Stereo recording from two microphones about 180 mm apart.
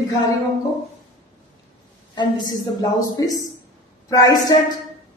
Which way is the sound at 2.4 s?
20° left (ahead or behind).